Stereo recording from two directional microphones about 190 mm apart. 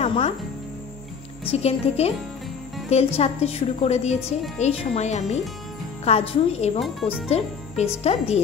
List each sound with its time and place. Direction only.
0.0 s music: 30° left (ahead or behind)
1.5 s a woman's voice: 35° left (ahead or behind)
6.8 s speech: centre (ahead or behind)
7.2 s a woman's voice: 35° left (ahead or behind)